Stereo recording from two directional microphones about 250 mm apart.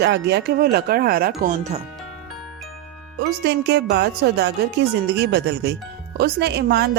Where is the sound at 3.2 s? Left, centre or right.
Right.